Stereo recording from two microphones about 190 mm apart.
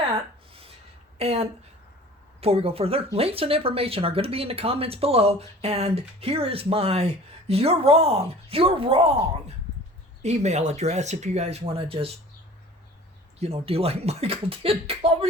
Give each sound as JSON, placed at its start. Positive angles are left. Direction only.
{"t": 1.2, "sound": "speech", "side_deg": -30}
{"t": 10.2, "sound": "speech", "side_deg": -35}
{"t": 13.4, "sound": "speech", "side_deg": -30}